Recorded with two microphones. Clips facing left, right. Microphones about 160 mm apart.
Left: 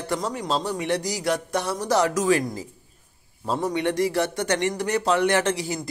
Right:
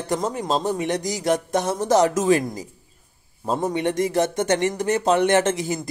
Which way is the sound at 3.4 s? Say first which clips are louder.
Right 2 dB; 20° right (ahead or behind).